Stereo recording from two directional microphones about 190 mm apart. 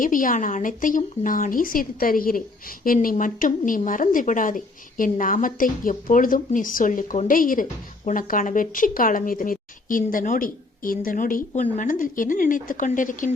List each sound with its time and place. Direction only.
0.0 s speech: 45° left (ahead or behind)